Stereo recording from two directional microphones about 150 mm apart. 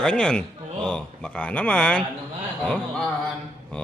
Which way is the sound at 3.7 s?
10° left (ahead or behind).